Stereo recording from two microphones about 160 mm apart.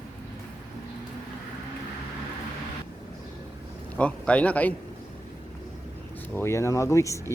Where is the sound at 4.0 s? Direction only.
10° left (ahead or behind).